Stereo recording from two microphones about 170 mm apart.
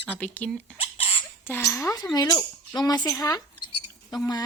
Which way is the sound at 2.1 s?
25° left (ahead or behind).